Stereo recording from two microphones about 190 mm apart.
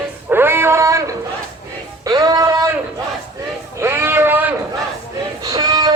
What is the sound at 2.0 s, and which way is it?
Music, 20° right (ahead or behind).